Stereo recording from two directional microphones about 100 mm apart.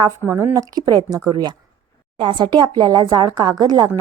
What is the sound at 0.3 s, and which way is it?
Speech, 25° right (ahead or behind).